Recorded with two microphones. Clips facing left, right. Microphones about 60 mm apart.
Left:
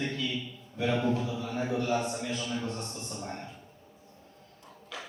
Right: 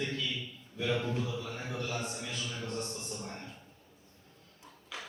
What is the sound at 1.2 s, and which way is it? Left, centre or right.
A man's voice, centre.